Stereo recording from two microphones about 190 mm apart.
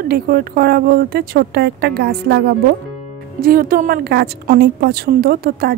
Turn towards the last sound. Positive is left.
turn(degrees=-50)  # may be behind; listen again after turning